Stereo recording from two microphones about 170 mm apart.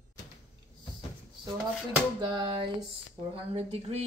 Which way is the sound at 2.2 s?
30° right (ahead or behind).